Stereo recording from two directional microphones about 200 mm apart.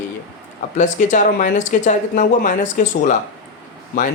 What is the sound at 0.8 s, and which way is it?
Speech, 40° left (ahead or behind).